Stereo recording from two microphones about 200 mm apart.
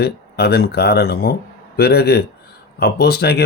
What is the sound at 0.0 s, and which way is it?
Speech, 50° left (ahead or behind).